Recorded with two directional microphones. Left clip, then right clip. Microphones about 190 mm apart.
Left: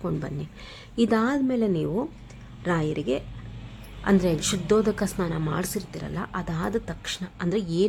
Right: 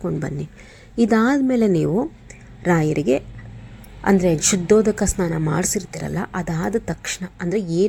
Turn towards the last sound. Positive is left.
turn(degrees=-10)  # may be behind; listen again after turning